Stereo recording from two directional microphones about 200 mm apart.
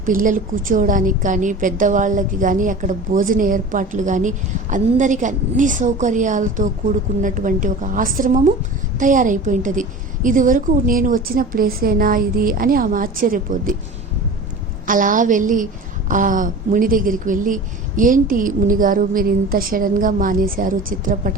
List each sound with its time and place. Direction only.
0.0 s a woman's voice: 40° right (ahead or behind)
14.8 s a woman's voice: 40° right (ahead or behind)